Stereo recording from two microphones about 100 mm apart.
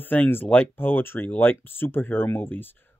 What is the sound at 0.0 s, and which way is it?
Speech, 20° left (ahead or behind).